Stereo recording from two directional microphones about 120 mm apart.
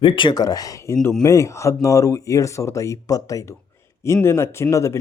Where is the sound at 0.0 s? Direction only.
45° left (ahead or behind).